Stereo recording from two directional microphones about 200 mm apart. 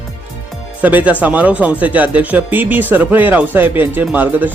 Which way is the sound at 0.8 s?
10° right (ahead or behind).